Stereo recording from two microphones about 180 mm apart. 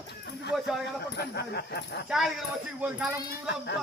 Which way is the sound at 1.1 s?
65° left (ahead or behind).